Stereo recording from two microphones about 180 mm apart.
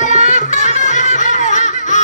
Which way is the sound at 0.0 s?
45° left (ahead or behind).